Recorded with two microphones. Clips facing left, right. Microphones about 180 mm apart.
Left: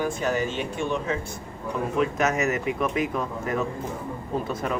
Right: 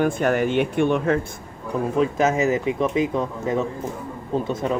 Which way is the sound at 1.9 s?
30° right (ahead or behind).